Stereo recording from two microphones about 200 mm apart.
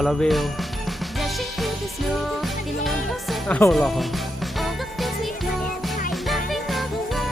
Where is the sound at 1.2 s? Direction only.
Centre (ahead or behind).